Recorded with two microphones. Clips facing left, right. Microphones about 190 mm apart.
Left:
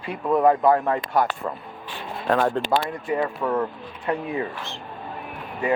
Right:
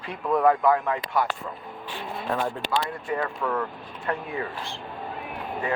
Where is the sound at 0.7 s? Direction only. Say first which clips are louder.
Left 4 dB; 40° left (ahead or behind).